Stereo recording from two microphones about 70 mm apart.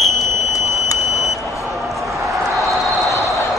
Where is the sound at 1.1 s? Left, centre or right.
Centre.